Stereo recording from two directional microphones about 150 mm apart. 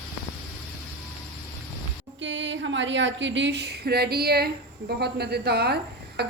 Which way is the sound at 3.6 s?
90° right.